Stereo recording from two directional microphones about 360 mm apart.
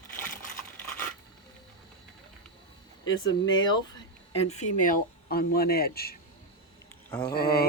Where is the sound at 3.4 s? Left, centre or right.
Left.